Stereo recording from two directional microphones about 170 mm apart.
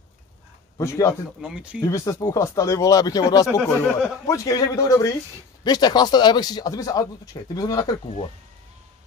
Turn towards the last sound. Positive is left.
turn(degrees=20)  # may be behind; listen again after turning